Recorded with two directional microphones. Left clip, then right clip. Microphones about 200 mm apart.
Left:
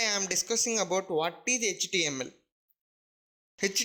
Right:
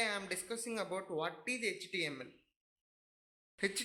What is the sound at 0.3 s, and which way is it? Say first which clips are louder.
A man's voice: left 12 dB; 35° left (ahead or behind).